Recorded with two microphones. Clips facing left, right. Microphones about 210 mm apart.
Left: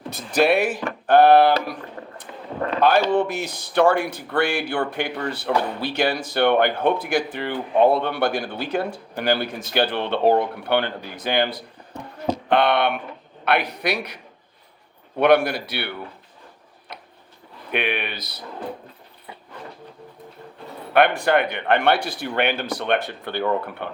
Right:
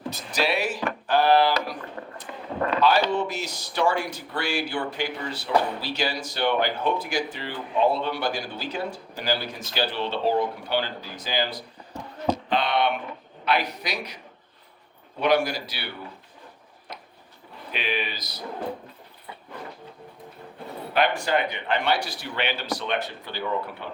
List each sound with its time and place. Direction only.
0.1 s speech: 55° left (ahead or behind)
2.0 s a sound: 35° left (ahead or behind)
3.1 s speech: 55° left (ahead or behind)
15.2 s speech: 60° left (ahead or behind)
17.7 s speech: 60° left (ahead or behind)
20.9 s speech: 60° left (ahead or behind)